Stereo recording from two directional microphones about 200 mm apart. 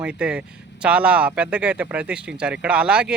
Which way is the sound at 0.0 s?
5° right (ahead or behind).